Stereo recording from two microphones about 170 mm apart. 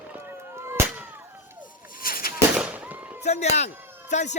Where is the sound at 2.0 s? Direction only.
60° left (ahead or behind).